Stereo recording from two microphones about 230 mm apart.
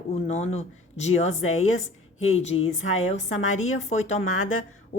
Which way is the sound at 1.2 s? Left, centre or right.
Left.